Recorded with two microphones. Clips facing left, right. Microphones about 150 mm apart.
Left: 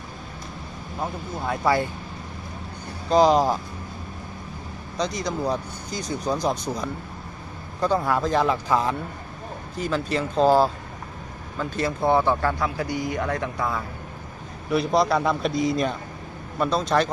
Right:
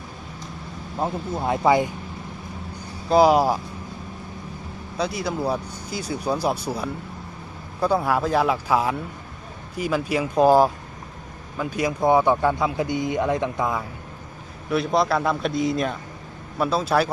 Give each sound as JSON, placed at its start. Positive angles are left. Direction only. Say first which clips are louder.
{"t": 0.9, "sound": "speech", "louder": "right 4 dB", "side_deg": -25}
{"t": 3.1, "sound": "speech", "louder": "right 1 dB", "side_deg": -10}
{"t": 4.9, "sound": "speech", "louder": "right 1 dB", "side_deg": -5}
{"t": 14.7, "sound": "a man's voice", "louder": "even", "side_deg": 0}